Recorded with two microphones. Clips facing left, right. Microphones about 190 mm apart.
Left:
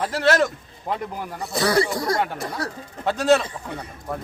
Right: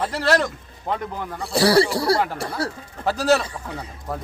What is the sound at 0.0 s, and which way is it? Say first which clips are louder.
Speech: left 1 dB; centre (ahead or behind).